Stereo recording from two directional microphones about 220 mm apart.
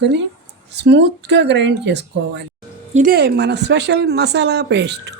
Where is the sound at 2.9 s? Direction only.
40° right (ahead or behind).